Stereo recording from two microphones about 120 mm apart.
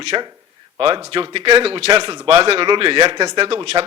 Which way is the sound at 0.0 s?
40° right (ahead or behind).